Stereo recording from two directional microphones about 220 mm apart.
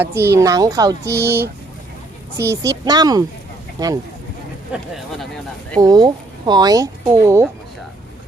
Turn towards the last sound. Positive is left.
turn(degrees=-10)  # may be behind; listen again after turning